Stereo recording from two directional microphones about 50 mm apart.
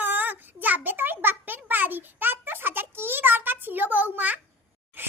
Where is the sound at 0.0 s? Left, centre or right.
Right.